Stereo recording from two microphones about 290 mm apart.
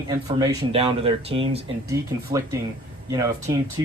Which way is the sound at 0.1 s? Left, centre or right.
Centre.